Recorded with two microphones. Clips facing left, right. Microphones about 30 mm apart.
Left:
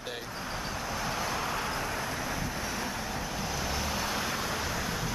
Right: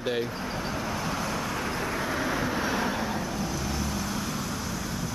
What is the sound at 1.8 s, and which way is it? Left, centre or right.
Vehicle, centre.